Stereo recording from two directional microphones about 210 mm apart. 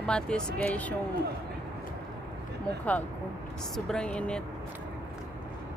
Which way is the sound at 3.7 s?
5° left (ahead or behind).